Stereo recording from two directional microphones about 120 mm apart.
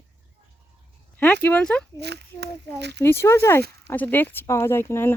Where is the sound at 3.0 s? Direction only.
20° left (ahead or behind).